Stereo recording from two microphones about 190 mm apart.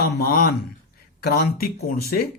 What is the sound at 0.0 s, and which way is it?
Speech, 50° left (ahead or behind).